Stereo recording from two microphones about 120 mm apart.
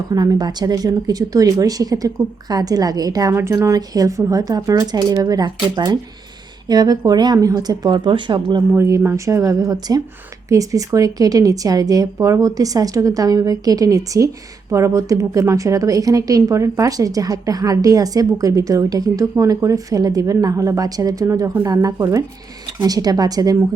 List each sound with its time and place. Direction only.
0.1 s speech: 30° right (ahead or behind)
8.7 s a woman's voice: 20° right (ahead or behind)